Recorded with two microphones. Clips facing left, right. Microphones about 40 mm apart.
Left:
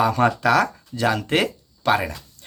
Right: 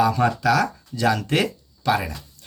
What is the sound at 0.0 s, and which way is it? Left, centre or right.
A man's voice, left.